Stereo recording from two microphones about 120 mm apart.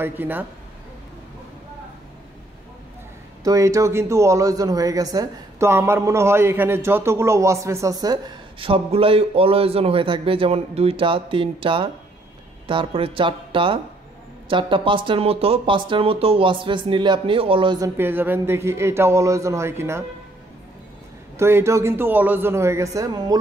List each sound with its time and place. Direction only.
0.0 s speech: 15° right (ahead or behind)
3.4 s speech: 25° right (ahead or behind)
8.5 s speech: 50° right (ahead or behind)
17.7 s speech: 25° right (ahead or behind)
21.4 s speech: 20° right (ahead or behind)